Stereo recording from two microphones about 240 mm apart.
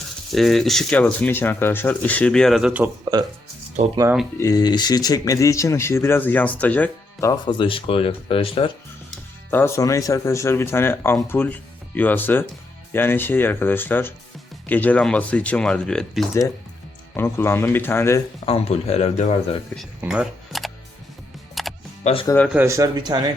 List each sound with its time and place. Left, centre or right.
0.3 s speech: centre
4.4 s speech: centre
9.5 s speech: centre
18.4 s speech: left
20.0 s camera: centre
21.6 s music: centre
22.0 s speech: left
22.3 s speech: centre
22.5 s speech: centre